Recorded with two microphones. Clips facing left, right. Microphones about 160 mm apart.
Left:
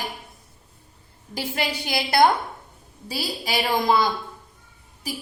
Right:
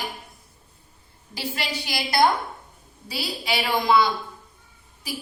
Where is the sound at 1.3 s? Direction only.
55° left (ahead or behind).